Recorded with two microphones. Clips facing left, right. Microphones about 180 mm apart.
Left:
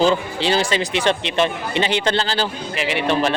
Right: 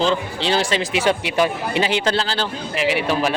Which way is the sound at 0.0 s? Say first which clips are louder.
Left 3 dB; 5° left (ahead or behind).